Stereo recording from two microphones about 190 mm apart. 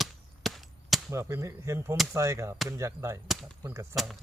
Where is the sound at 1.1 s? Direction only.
15° right (ahead or behind).